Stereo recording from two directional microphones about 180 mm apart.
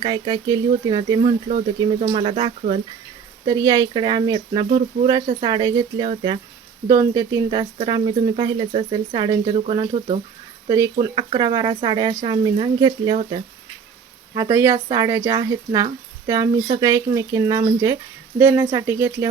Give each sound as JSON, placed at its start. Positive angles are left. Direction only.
{"t": 0.0, "sound": "speech", "side_deg": -25}
{"t": 3.4, "sound": "speech", "side_deg": -20}
{"t": 6.8, "sound": "speech", "side_deg": -20}
{"t": 10.7, "sound": "speech", "side_deg": -20}
{"t": 14.3, "sound": "speech", "side_deg": -15}